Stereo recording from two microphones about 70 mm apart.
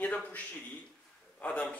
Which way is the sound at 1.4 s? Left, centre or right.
Centre.